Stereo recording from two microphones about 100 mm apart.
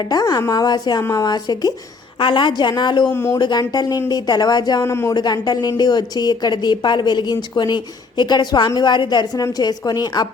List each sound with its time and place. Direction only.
0.0 s a woman's voice: 40° left (ahead or behind)
2.1 s a woman's voice: 55° left (ahead or behind)
3.1 s speech: 25° left (ahead or behind)
3.3 s a woman's voice: 40° left (ahead or behind)
4.9 s speech: 30° left (ahead or behind)
5.1 s a woman's voice: 45° left (ahead or behind)